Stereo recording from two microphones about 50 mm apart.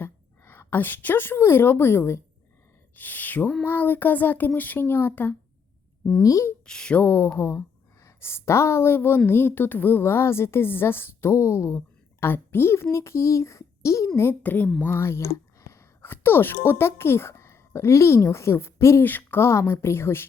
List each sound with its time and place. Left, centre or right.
0.0 s a woman's voice: left
2.9 s speech: left
6.2 s speech: left
6.7 s speech: centre
6.9 s speech: left
7.3 s a woman's voice: left
11.3 s speech: left
12.2 s speech: left
14.4 s speech: left
14.9 s speech: left
19.0 s speech: left
19.4 s speech: left